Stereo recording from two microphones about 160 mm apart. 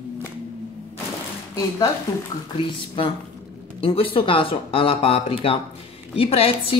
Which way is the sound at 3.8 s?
35° left (ahead or behind).